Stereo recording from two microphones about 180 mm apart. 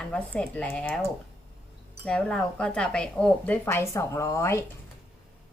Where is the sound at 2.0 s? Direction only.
5° left (ahead or behind).